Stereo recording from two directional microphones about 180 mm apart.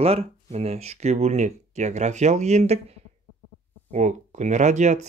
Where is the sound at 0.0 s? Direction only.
35° right (ahead or behind).